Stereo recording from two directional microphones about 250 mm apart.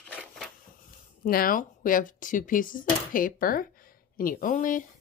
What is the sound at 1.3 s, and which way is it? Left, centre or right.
Speech, left.